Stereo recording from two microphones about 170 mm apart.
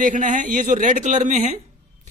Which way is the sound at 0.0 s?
50° right (ahead or behind).